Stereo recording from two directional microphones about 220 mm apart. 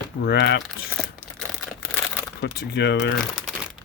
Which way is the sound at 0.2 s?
45° left (ahead or behind).